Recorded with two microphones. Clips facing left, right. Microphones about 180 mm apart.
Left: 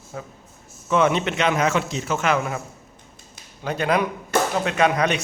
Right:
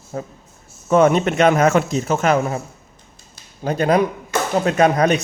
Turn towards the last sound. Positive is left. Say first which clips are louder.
# right 5 dB
turn(degrees=-40)  # may be behind; listen again after turning